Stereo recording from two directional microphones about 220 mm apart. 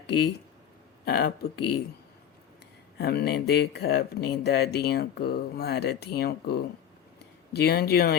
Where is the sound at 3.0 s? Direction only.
45° left (ahead or behind).